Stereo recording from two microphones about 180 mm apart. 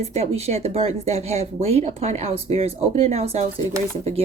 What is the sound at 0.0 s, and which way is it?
Speech, 35° right (ahead or behind).